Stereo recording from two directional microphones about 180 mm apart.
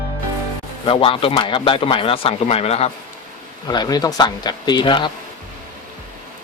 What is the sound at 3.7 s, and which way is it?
A man's voice, 20° left (ahead or behind).